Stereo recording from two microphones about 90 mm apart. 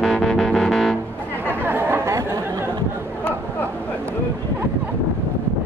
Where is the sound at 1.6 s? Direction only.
25° right (ahead or behind).